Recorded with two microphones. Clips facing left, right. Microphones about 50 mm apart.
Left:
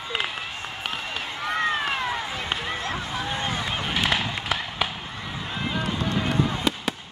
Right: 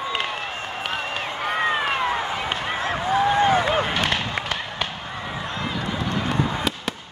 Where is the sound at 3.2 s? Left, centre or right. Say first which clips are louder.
Right 11 dB; right.